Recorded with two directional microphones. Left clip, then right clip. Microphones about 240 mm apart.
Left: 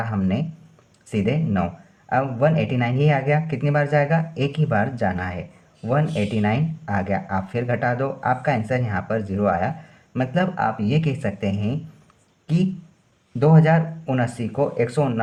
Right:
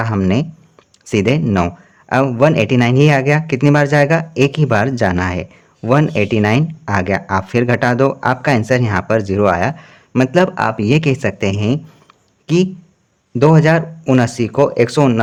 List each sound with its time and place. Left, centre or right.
0.0 s a man's voice: right
13.4 s a man's voice: right